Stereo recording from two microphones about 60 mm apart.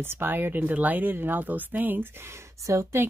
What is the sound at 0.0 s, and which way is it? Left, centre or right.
Speech, right.